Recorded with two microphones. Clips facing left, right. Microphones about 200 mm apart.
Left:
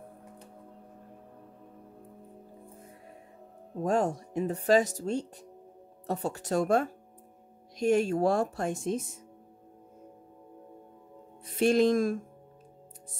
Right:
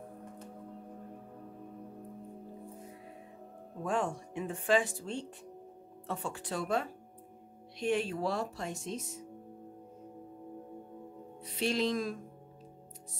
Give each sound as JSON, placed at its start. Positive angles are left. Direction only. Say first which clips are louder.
{"t": 3.8, "sound": "speech", "louder": "left 6 dB", "side_deg": 40}
{"t": 11.4, "sound": "speech", "louder": "left 8 dB", "side_deg": 50}